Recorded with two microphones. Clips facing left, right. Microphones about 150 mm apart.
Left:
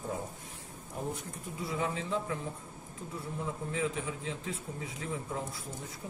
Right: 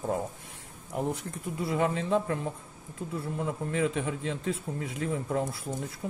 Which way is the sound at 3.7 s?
65° right (ahead or behind).